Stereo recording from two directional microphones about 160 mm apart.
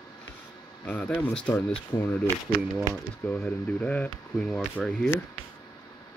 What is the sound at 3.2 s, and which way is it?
Speech, 10° left (ahead or behind).